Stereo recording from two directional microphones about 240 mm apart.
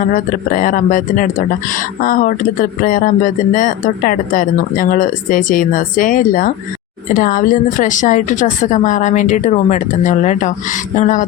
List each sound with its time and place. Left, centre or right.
0.0 s speech: left